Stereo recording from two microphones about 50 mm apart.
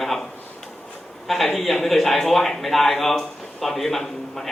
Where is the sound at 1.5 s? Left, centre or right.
Centre.